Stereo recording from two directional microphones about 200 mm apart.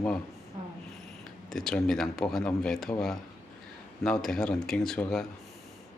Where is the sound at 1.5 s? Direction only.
5° left (ahead or behind).